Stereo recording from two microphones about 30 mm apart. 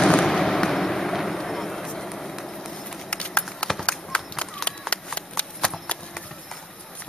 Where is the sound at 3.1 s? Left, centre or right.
Left.